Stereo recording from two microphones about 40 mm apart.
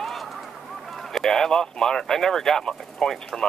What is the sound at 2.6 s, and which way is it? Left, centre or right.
Speech, left.